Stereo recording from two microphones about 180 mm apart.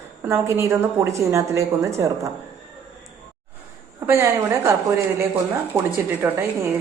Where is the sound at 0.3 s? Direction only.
15° right (ahead or behind).